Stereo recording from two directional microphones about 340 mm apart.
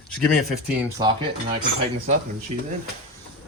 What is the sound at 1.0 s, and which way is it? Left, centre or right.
Speech, centre.